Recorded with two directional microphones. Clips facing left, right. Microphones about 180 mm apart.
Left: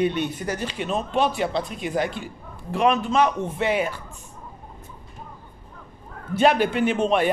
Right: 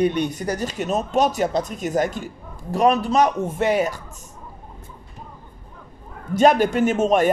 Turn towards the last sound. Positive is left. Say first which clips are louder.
# right 3 dB
turn(degrees=-45)  # may be behind; listen again after turning